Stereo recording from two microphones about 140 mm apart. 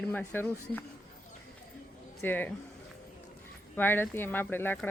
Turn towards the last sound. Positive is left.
turn(degrees=15)  # may be behind; listen again after turning